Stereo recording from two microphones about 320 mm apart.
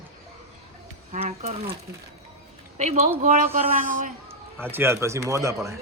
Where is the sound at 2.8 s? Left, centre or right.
Right.